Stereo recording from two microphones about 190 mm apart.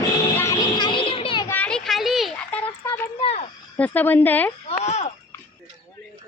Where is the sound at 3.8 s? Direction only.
10° left (ahead or behind).